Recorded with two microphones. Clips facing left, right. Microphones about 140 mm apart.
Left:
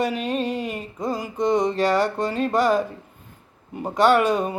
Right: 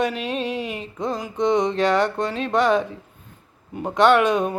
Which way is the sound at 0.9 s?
5° left (ahead or behind).